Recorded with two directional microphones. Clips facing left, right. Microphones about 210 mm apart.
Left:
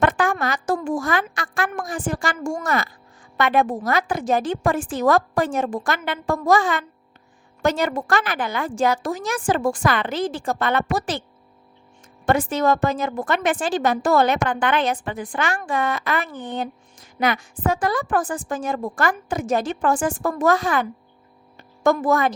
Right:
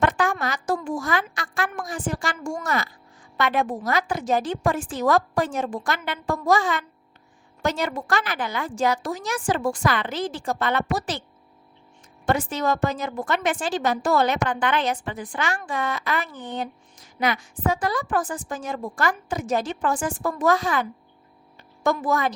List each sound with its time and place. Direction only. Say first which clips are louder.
0.0 s a woman's voice: left 2 dB; 55° left (ahead or behind)
12.2 s a woman's voice: left 4 dB; 55° left (ahead or behind)
21.8 s a woman's voice: left 4 dB; 50° left (ahead or behind)